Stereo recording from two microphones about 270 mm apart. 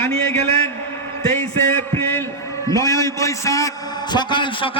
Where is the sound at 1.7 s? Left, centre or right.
Centre.